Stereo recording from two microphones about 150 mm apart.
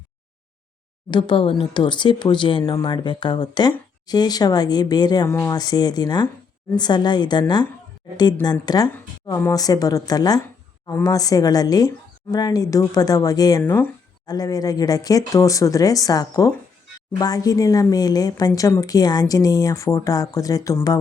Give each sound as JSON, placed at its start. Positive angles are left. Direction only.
{"t": 1.1, "sound": "speech", "side_deg": 35}
{"t": 13.6, "sound": "speech", "side_deg": 15}